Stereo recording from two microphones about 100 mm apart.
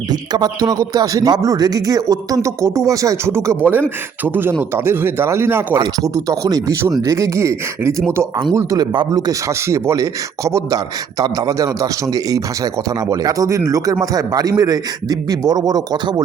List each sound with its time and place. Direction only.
0.1 s a man's voice: 40° right (ahead or behind); by 5.8 s 25° right (ahead or behind)
5.8 s a man's voice: 40° right (ahead or behind)
8.8 s speech: 45° right (ahead or behind)
9.5 s a man's voice: 30° right (ahead or behind)